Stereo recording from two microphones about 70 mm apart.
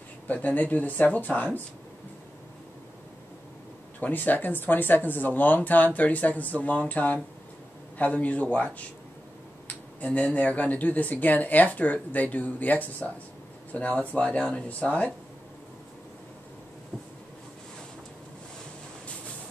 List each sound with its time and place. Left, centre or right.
0.3 s speech: left
4.0 s speech: left
9.9 s speech: left